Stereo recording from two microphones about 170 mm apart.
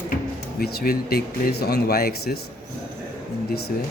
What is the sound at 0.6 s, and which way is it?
Speech, 65° left (ahead or behind).